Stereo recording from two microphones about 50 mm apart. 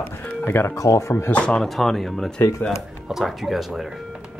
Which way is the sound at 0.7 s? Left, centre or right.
Left.